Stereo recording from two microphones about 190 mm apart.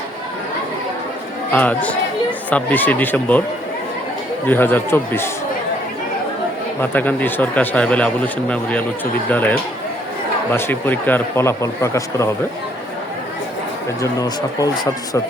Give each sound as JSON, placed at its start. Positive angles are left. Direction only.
{"t": 1.5, "sound": "a man's voice", "side_deg": 5}
{"t": 4.4, "sound": "a man's voice", "side_deg": 10}
{"t": 6.9, "sound": "a man's voice", "side_deg": 10}
{"t": 14.0, "sound": "speech", "side_deg": 20}